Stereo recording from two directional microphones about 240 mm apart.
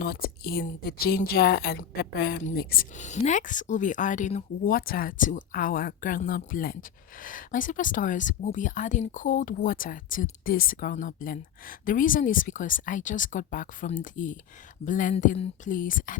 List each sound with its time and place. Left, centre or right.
0.0 s speech: left